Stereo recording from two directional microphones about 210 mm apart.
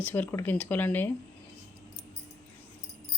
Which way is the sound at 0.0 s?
10° left (ahead or behind).